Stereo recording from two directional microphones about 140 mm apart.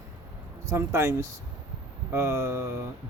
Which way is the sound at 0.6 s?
20° right (ahead or behind).